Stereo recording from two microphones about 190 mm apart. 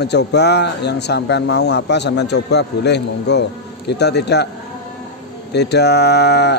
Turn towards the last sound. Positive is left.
turn(degrees=60)  # may be behind; listen again after turning